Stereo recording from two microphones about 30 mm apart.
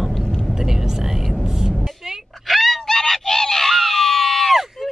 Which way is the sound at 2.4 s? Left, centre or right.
Centre.